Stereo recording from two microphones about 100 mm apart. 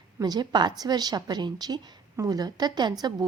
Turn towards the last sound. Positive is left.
turn(degrees=-45)  # may be behind; listen again after turning